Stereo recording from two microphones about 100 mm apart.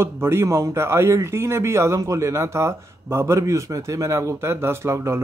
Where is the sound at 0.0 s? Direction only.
25° right (ahead or behind).